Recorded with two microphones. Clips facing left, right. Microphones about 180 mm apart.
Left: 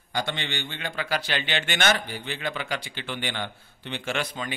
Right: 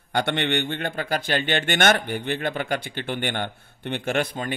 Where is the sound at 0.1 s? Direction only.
65° right (ahead or behind).